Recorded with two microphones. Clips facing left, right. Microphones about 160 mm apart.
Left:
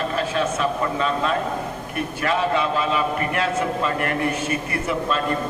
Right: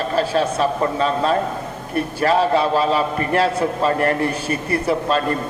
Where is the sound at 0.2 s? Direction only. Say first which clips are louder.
Right 6 dB; 35° right (ahead or behind).